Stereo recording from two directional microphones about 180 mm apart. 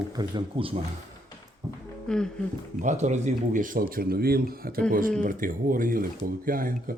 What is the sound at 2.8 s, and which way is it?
Speech, 40° right (ahead or behind).